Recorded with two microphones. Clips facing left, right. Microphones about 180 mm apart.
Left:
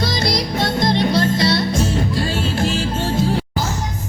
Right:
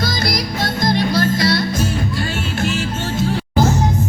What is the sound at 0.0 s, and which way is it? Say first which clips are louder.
Music: left 1 dB; 25° left (ahead or behind).